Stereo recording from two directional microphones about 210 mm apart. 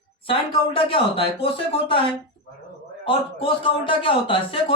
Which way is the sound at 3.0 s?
25° left (ahead or behind).